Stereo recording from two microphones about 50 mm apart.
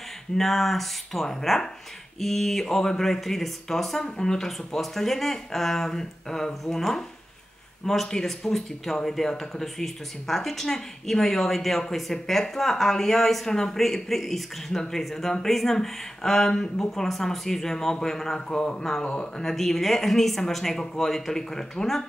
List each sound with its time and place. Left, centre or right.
0.4 s speech: centre
19.4 s speech: centre